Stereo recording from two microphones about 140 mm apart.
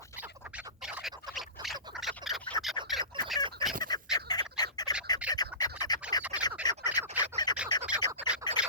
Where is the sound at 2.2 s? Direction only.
30° right (ahead or behind).